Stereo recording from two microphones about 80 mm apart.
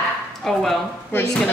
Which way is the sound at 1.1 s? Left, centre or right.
Left.